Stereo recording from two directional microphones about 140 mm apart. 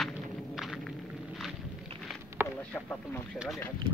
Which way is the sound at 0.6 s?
Centre (ahead or behind).